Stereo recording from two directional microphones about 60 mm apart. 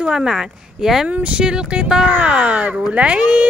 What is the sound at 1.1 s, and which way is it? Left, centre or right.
Speech, centre.